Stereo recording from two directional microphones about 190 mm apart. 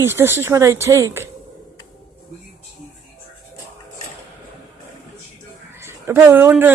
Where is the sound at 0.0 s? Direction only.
15° right (ahead or behind).